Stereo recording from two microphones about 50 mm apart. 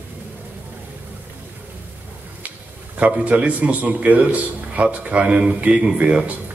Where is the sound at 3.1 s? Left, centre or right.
Right.